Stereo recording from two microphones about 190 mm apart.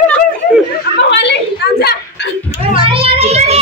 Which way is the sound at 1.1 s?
65° left (ahead or behind).